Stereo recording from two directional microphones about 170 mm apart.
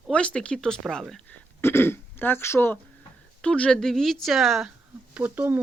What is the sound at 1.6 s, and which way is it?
Speech, 15° left (ahead or behind).